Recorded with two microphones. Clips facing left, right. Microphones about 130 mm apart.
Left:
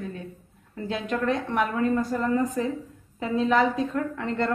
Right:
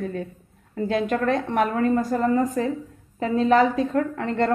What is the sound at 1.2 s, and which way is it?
A woman's voice, 35° right (ahead or behind).